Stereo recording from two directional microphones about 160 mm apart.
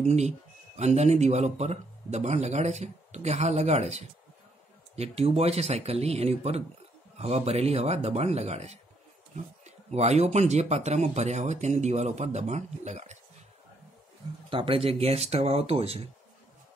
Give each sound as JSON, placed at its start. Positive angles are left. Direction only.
{"t": 0.0, "sound": "speech", "side_deg": -45}
{"t": 14.5, "sound": "speech", "side_deg": -35}